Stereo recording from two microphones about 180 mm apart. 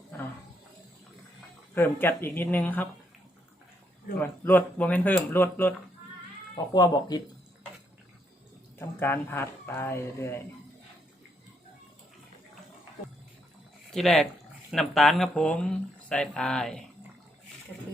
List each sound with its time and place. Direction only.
1.7 s speech: 10° left (ahead or behind)
4.2 s speech: 10° left (ahead or behind)
6.7 s speech: 20° left (ahead or behind)
8.8 s speech: 15° left (ahead or behind)
13.9 s speech: centre (ahead or behind)